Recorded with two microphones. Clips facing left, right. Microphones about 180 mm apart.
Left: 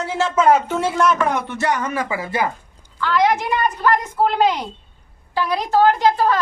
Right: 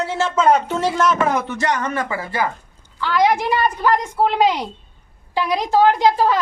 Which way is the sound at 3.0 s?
10° right (ahead or behind).